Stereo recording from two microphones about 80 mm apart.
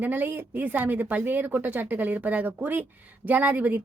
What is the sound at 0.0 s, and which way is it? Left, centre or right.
Speech, right.